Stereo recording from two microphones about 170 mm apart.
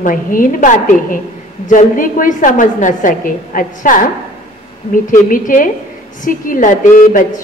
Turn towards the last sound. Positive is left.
turn(degrees=50)  # may be behind; listen again after turning